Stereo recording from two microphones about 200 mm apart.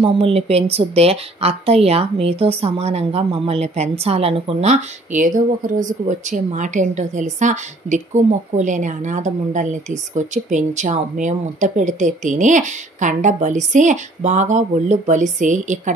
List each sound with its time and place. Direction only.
0.0 s a woman's voice: 30° right (ahead or behind)